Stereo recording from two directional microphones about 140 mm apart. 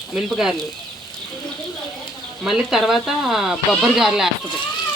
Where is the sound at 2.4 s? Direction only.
Centre (ahead or behind).